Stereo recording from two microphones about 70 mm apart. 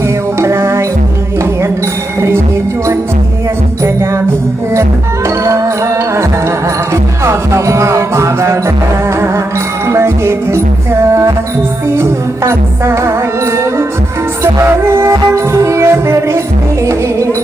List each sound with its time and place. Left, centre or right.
0.3 s music: right
5.5 s music: right
6.9 s music: right
9.9 s music: right
12.5 s music: right
14.4 s music: right